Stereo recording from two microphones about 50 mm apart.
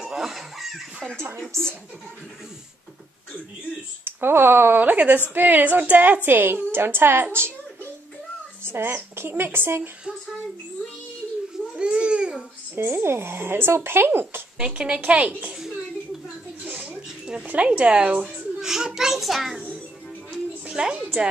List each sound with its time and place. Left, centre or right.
0.0 s speech: centre
1.5 s speech: right
4.0 s a woman's voice: right
8.6 s a woman's voice: right
11.7 s babbling: right
12.7 s a woman's voice: right
14.6 s speech: centre
16.6 s a sound: right
17.4 s speech: right
18.6 s a child's voice: centre
20.2 s music: centre